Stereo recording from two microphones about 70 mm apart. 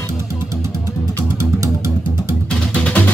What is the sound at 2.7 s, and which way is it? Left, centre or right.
Music, centre.